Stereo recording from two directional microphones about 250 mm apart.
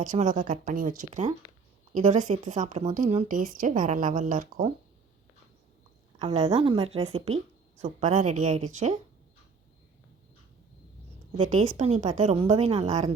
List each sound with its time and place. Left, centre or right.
0.0 s a woman's voice: right
6.1 s a woman's voice: right
11.3 s a woman's voice: right